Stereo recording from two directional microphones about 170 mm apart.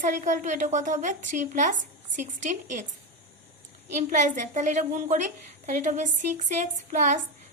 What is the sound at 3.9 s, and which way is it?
A woman's voice, 45° right (ahead or behind).